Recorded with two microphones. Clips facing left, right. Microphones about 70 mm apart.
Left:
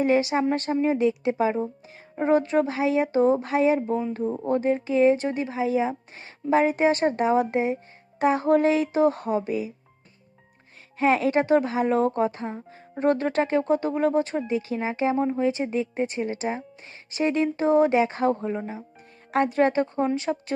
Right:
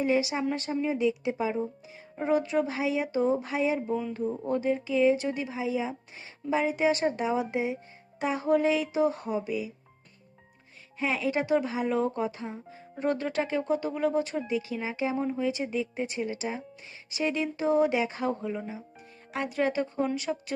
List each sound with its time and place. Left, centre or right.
0.0 s speech: left
11.0 s speech: left